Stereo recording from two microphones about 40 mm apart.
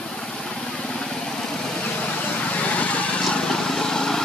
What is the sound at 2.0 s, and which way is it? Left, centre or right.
Vehicle, left.